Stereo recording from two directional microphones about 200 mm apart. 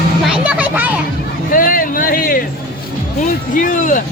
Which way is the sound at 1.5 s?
45° left (ahead or behind).